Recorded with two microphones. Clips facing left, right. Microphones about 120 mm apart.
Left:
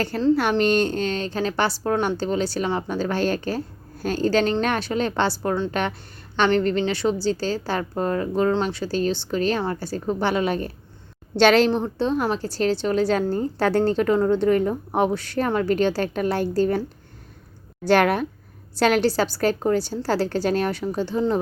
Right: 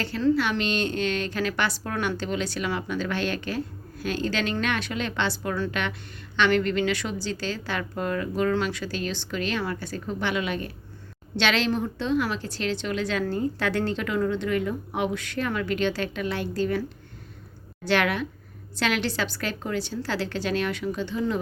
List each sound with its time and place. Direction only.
0.1 s a woman's voice: 45° left (ahead or behind)
17.8 s a woman's voice: 45° left (ahead or behind)